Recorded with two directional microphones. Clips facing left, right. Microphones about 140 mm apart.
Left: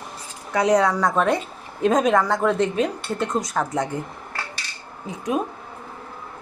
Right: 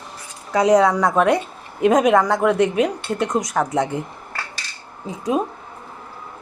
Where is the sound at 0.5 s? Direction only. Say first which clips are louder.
Right 4 dB; 15° right (ahead or behind).